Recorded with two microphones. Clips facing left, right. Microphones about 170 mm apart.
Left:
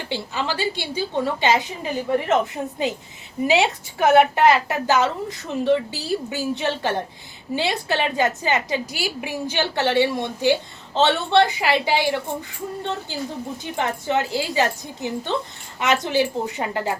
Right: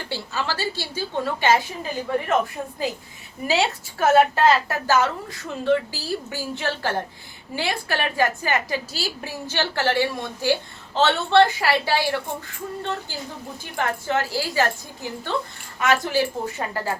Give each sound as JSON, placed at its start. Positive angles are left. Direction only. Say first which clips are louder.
{"t": 0.1, "sound": "a woman's voice", "louder": "left 2 dB", "side_deg": 15}
{"t": 3.4, "sound": "a woman's voice", "louder": "left 3 dB", "side_deg": 20}
{"t": 13.7, "sound": "a woman's voice", "louder": "left 1 dB", "side_deg": 20}